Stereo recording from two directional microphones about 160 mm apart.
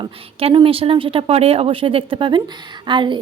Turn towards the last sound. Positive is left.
turn(degrees=-30)  # may be behind; listen again after turning